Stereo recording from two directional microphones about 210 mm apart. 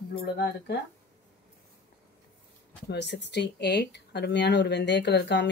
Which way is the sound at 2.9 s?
55° left (ahead or behind).